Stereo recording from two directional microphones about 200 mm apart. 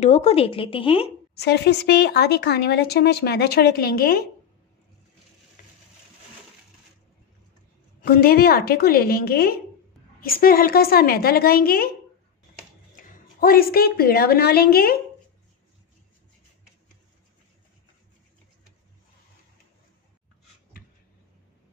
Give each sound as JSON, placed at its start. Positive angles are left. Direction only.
{"t": 0.0, "sound": "speech", "side_deg": 35}
{"t": 1.3, "sound": "speech", "side_deg": 55}
{"t": 8.0, "sound": "speech", "side_deg": 50}
{"t": 12.9, "sound": "a woman's voice", "side_deg": 50}